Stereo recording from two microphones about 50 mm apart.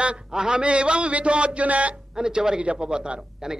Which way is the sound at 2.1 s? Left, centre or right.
Centre.